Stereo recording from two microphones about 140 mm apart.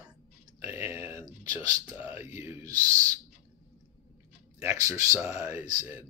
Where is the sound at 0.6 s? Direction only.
20° right (ahead or behind).